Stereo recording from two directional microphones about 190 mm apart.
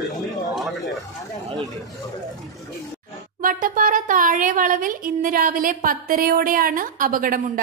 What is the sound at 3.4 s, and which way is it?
A woman's voice, 45° right (ahead or behind).